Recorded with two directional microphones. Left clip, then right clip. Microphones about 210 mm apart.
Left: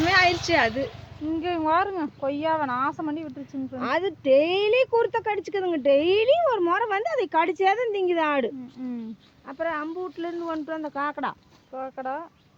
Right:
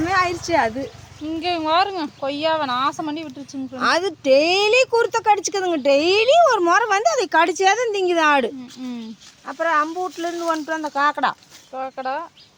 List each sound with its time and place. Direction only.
0.0 s a sound: 55° right (ahead or behind)
1.4 s speech: 5° right (ahead or behind)
3.8 s speech: 45° right (ahead or behind)
8.8 s speech: 10° right (ahead or behind)
9.5 s speech: 55° right (ahead or behind)
11.7 s speech: 5° right (ahead or behind)